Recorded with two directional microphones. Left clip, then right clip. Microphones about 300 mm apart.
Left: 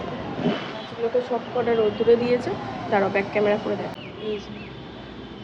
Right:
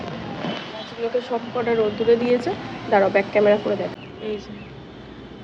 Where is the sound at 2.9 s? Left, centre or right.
Centre.